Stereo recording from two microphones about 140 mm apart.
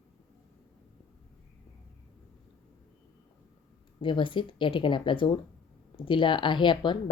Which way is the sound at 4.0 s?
35° left (ahead or behind).